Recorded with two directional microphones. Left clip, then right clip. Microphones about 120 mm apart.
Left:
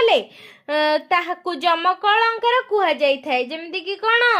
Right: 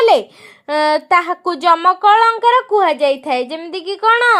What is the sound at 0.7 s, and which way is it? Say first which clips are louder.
A woman's voice: right 5 dB; 45° right (ahead or behind).